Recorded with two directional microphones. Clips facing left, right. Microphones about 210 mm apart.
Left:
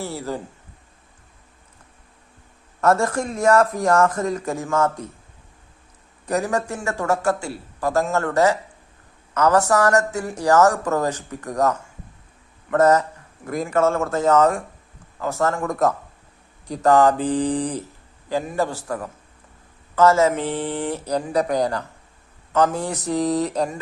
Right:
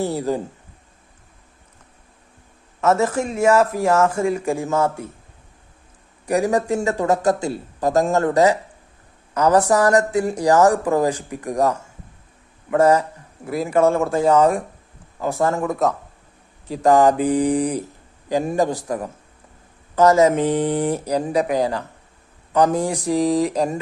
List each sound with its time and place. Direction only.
0.0 s speech: 20° right (ahead or behind)
2.8 s speech: 5° right (ahead or behind)
6.2 s speech: 15° right (ahead or behind)